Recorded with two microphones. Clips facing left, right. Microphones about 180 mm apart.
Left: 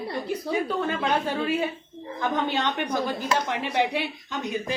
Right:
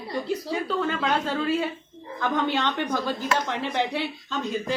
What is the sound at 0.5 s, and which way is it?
Speech, 15° left (ahead or behind).